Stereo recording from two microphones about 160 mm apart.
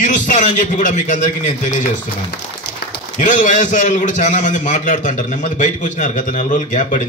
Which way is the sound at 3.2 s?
50° left (ahead or behind).